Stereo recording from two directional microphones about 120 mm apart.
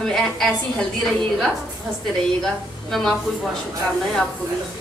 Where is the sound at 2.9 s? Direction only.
Centre (ahead or behind).